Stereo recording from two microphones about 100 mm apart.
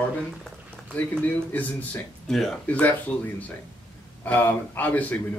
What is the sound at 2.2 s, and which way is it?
Speech, 5° left (ahead or behind).